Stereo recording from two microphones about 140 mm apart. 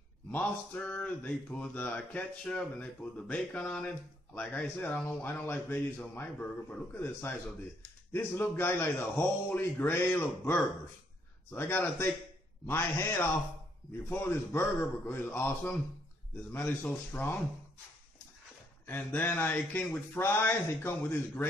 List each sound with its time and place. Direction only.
0.3 s speech: 10° left (ahead or behind)
18.9 s speech: 15° left (ahead or behind)